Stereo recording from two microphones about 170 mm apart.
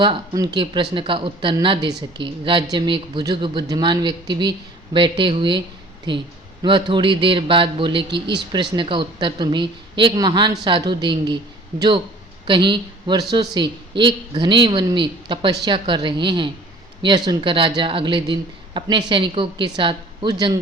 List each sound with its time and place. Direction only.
0.0 s speech: 25° right (ahead or behind)